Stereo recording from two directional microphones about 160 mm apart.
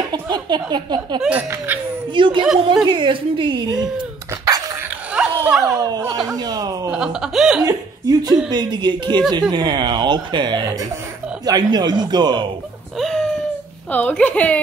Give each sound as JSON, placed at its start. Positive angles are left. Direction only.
{"t": 0.1, "sound": "speech", "side_deg": -30}
{"t": 1.2, "sound": "speech", "side_deg": -10}
{"t": 2.1, "sound": "a woman's voice", "side_deg": -30}
{"t": 5.1, "sound": "dog", "side_deg": -5}
{"t": 5.7, "sound": "speech", "side_deg": -25}
{"t": 6.9, "sound": "speech", "side_deg": -5}
{"t": 7.6, "sound": "speech", "side_deg": -25}
{"t": 12.9, "sound": "a sound", "side_deg": 0}
{"t": 13.8, "sound": "a woman's voice", "side_deg": 10}